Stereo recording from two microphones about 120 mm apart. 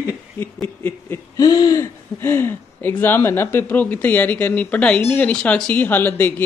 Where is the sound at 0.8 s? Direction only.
20° left (ahead or behind).